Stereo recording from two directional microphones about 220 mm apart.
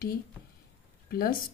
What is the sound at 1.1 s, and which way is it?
Speech, 40° left (ahead or behind).